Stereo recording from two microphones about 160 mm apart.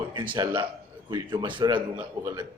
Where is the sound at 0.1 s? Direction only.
30° right (ahead or behind).